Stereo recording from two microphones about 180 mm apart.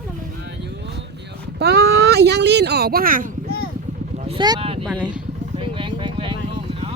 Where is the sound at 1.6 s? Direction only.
65° right (ahead or behind).